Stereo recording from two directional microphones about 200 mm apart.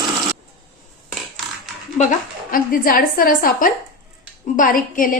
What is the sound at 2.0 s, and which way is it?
A woman's voice, 40° left (ahead or behind).